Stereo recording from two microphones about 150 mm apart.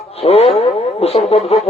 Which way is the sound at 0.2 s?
40° left (ahead or behind).